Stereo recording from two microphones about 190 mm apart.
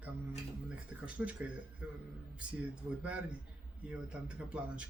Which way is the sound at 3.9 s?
5° right (ahead or behind).